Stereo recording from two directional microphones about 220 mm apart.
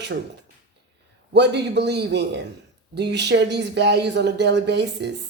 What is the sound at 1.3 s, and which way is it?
Speech, 50° right (ahead or behind).